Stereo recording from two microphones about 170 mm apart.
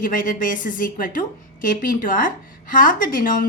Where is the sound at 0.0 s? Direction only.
55° left (ahead or behind).